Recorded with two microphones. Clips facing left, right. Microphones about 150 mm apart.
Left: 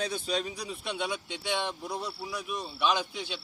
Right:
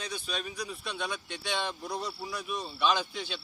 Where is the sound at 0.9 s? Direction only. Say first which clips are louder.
Left 5 dB; 10° left (ahead or behind).